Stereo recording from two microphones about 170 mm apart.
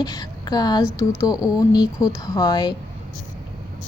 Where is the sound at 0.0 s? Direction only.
20° left (ahead or behind).